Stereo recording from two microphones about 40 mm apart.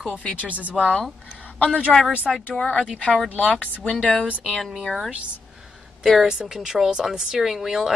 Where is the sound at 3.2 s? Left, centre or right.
Left.